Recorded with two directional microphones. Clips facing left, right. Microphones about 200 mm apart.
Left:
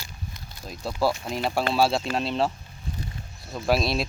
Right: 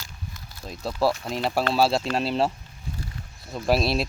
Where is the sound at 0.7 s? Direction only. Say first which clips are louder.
Right 1 dB; centre (ahead or behind).